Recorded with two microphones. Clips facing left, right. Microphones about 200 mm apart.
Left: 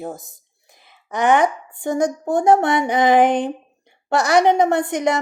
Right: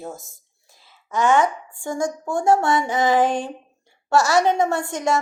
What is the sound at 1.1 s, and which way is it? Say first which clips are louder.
A woman's voice: left 2 dB; 15° left (ahead or behind).